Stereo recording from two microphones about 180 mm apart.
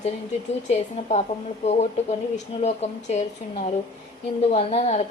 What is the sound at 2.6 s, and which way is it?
Speech, 40° left (ahead or behind).